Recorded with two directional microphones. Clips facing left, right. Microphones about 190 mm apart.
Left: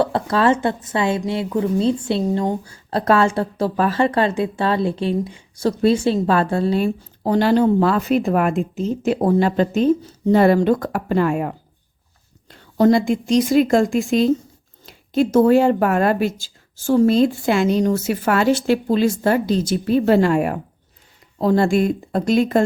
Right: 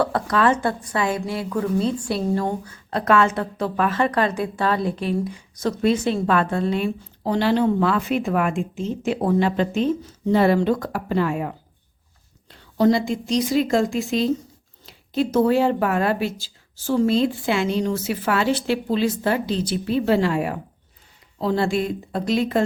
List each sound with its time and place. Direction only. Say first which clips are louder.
0.0 s a woman's voice: left 2 dB; 25° left (ahead or behind)
2.6 s a woman's voice: left 3 dB; 35° left (ahead or behind)